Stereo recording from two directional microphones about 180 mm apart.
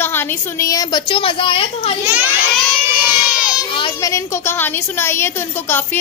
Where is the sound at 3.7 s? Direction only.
25° left (ahead or behind).